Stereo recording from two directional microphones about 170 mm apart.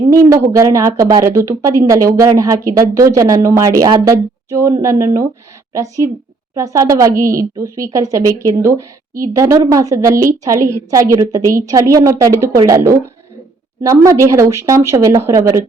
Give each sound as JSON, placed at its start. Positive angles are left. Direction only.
{"t": 0.1, "sound": "a woman's voice", "side_deg": -20}